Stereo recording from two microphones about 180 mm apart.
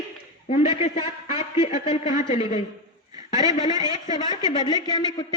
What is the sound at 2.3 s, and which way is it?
Speech, 30° left (ahead or behind).